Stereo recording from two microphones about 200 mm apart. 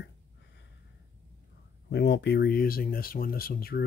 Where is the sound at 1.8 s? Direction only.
55° left (ahead or behind).